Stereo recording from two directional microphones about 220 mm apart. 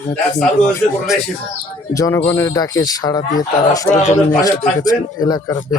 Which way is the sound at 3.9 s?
30° left (ahead or behind).